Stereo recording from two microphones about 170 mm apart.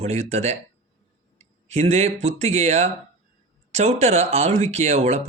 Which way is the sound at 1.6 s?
40° right (ahead or behind).